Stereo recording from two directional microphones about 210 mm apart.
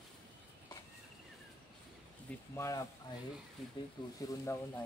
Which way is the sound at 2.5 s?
15° left (ahead or behind).